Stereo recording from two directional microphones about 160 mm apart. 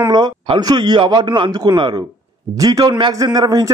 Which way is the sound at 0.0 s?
25° right (ahead or behind).